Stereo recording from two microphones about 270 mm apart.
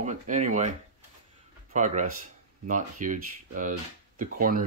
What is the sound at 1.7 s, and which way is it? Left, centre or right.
Speech, right.